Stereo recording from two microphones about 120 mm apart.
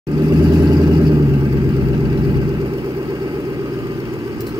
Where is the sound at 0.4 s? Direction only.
35° right (ahead or behind).